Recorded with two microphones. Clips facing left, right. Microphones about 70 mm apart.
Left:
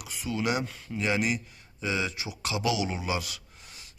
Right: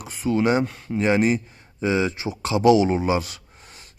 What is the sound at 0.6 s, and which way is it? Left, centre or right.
Speech, right.